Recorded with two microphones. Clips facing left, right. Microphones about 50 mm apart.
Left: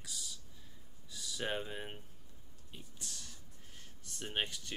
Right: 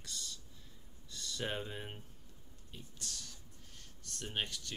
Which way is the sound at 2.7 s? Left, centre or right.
Centre.